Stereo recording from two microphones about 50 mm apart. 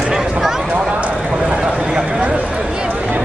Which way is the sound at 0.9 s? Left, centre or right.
Right.